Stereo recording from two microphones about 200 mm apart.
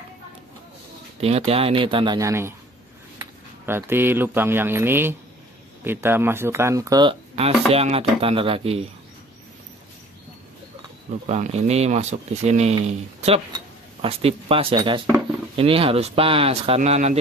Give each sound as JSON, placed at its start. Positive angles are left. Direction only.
{"t": 1.2, "sound": "speech", "side_deg": -30}
{"t": 11.2, "sound": "speech", "side_deg": -35}